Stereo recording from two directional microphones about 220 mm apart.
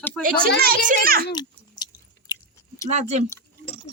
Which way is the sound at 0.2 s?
5° left (ahead or behind).